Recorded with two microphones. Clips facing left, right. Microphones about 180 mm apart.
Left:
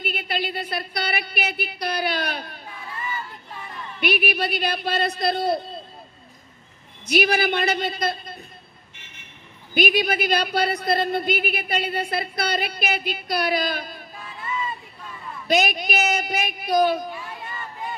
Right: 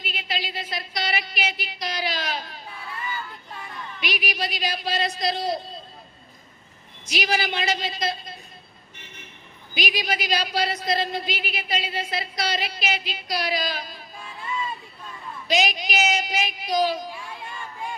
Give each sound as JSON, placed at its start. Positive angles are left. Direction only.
{"t": 0.0, "sound": "a sound", "side_deg": 55}
{"t": 4.0, "sound": "speech", "side_deg": 55}
{"t": 7.0, "sound": "speech", "side_deg": 60}
{"t": 9.7, "sound": "speech", "side_deg": 55}
{"t": 15.4, "sound": "speech", "side_deg": 55}